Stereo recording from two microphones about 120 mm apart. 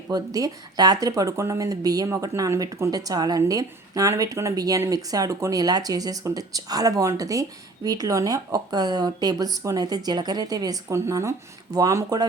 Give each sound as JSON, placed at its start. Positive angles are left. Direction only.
{"t": 0.1, "sound": "speech", "side_deg": -30}